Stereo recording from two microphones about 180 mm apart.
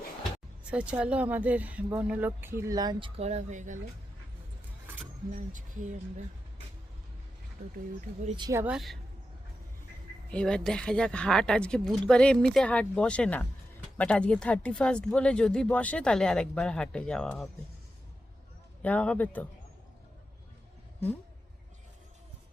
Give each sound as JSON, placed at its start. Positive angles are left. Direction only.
{"t": 0.6, "sound": "speech", "side_deg": -5}
{"t": 3.2, "sound": "speech", "side_deg": -40}
{"t": 5.3, "sound": "speech", "side_deg": -45}
{"t": 8.4, "sound": "speech", "side_deg": -20}
{"t": 8.6, "sound": "speech", "side_deg": 0}
{"t": 10.3, "sound": "speech", "side_deg": 5}
{"t": 18.8, "sound": "speech", "side_deg": 5}